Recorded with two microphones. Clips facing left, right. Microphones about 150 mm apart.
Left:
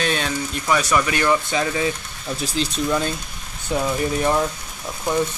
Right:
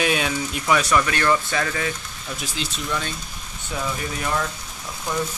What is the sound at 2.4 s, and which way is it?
Speech, 35° left (ahead or behind).